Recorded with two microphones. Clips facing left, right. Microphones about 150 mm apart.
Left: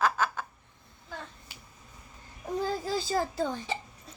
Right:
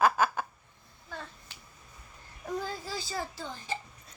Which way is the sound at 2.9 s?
45° left (ahead or behind).